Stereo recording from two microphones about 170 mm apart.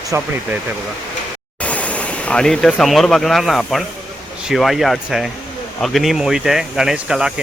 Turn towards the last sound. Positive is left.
turn(degrees=-5)  # may be behind; listen again after turning